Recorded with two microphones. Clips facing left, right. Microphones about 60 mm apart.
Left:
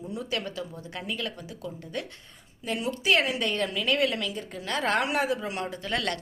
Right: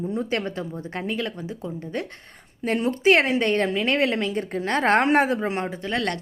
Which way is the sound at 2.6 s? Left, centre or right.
Right.